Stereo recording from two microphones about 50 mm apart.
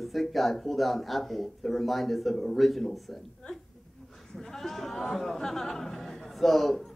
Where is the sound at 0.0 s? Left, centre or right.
Centre.